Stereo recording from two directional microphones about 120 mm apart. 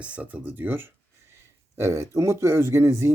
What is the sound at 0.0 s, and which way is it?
Speech, 10° right (ahead or behind).